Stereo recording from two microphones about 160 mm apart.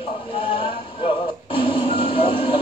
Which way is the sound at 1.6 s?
35° left (ahead or behind).